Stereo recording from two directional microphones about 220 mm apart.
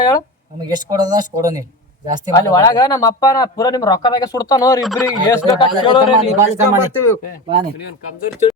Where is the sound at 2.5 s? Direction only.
15° left (ahead or behind).